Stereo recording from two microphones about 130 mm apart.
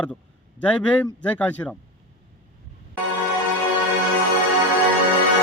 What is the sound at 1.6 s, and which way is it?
Speech, 20° left (ahead or behind).